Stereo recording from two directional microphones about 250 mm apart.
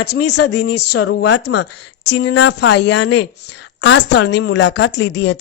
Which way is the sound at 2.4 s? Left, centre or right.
Left.